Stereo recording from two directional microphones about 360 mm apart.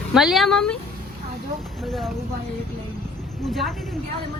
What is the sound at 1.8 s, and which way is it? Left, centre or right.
Speech, centre.